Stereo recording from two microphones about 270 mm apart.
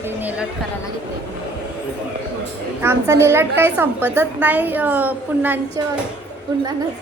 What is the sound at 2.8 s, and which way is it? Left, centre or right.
A woman's voice, centre.